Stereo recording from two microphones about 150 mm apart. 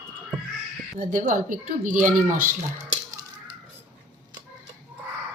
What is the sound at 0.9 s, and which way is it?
A woman's voice, 65° right (ahead or behind).